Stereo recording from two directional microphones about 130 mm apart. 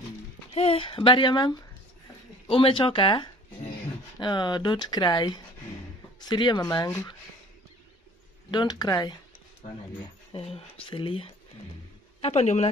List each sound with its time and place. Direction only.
0.6 s speech: 45° left (ahead or behind)
8.5 s speech: 35° left (ahead or behind)
10.3 s speech: 45° left (ahead or behind)
12.2 s speech: 55° left (ahead or behind)